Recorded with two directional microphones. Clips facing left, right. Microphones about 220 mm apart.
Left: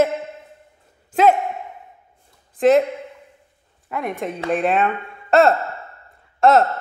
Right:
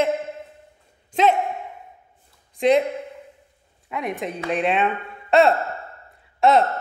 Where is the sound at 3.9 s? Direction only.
Centre (ahead or behind).